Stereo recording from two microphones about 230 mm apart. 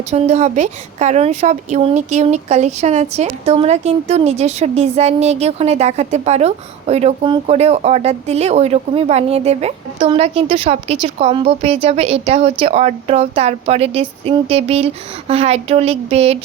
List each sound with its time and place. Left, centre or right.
0.1 s a woman's voice: right